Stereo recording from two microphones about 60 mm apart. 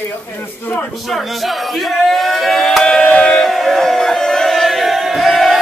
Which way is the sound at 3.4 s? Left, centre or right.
Centre.